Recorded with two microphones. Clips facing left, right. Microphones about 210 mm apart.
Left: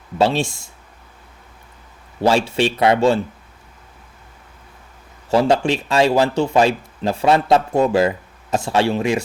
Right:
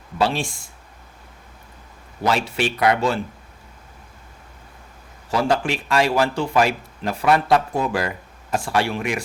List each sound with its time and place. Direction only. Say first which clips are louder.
0.2 s speech: left 4 dB; 25° left (ahead or behind)
2.2 s speech: left 5 dB; 25° left (ahead or behind)
5.3 s speech: left 5 dB; 25° left (ahead or behind)